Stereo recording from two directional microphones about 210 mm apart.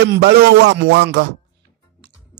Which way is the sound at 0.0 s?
50° right (ahead or behind).